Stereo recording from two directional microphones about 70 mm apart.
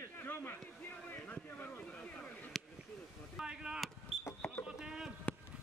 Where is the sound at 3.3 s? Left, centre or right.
Centre.